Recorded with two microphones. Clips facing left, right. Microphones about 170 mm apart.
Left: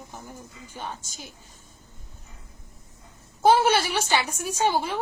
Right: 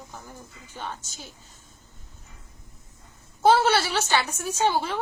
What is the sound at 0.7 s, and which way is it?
Speech, 10° left (ahead or behind).